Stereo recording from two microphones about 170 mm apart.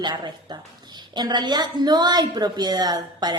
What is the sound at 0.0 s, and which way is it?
A woman's voice, 25° right (ahead or behind).